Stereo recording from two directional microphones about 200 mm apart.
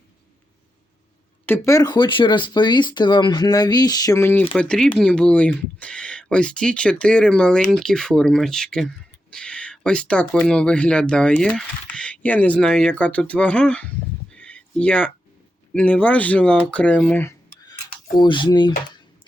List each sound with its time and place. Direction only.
1.5 s speech: 15° left (ahead or behind)
14.3 s a sound: 5° left (ahead or behind)
15.7 s speech: 5° left (ahead or behind); by 18.7 s 20° left (ahead or behind)